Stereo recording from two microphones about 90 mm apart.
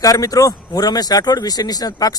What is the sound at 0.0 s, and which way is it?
Speech, 40° left (ahead or behind).